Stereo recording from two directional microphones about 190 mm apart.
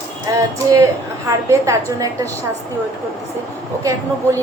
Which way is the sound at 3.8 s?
15° right (ahead or behind).